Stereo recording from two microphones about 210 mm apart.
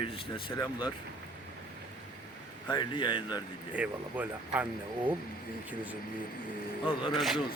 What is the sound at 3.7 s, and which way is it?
Speech, 5° right (ahead or behind).